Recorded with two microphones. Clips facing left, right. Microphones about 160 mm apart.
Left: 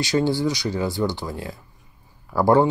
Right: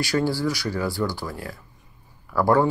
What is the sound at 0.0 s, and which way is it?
Speech, 20° left (ahead or behind).